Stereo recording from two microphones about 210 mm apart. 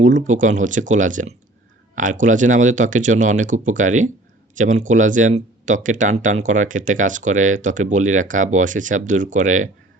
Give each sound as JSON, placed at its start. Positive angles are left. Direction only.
{"t": 0.0, "sound": "speech", "side_deg": -35}